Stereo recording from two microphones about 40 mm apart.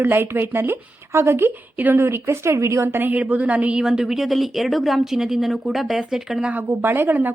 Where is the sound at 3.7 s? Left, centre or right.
Centre.